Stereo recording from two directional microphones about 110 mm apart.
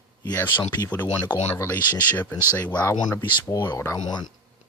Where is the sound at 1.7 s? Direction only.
15° left (ahead or behind).